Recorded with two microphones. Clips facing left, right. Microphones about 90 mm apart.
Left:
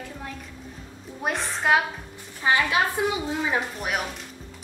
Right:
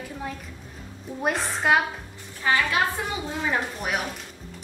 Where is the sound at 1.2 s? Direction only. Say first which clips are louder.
Right 1 dB; centre (ahead or behind).